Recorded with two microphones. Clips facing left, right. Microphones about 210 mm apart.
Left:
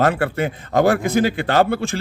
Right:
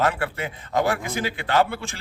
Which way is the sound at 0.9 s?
40° left (ahead or behind).